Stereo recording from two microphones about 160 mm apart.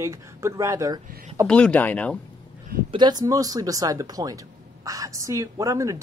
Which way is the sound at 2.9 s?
25° right (ahead or behind).